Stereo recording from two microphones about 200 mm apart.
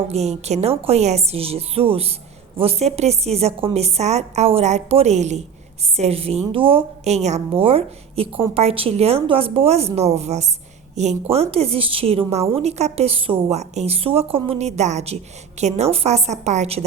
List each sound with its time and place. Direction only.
0.1 s a woman's voice: 35° right (ahead or behind)